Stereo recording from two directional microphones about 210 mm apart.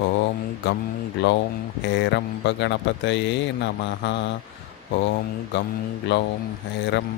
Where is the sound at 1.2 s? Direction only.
55° left (ahead or behind).